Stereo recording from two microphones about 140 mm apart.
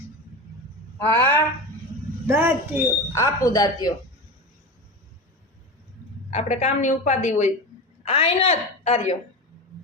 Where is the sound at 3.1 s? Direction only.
20° left (ahead or behind).